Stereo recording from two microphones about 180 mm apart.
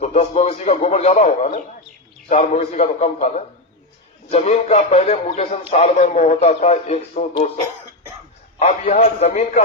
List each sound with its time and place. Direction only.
0.0 s speech: 35° left (ahead or behind)
8.5 s speech: 40° left (ahead or behind)